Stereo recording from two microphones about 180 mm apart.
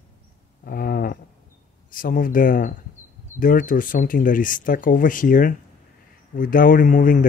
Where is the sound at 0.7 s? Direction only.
55° left (ahead or behind).